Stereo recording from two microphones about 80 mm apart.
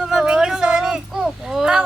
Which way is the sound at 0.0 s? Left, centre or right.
Centre.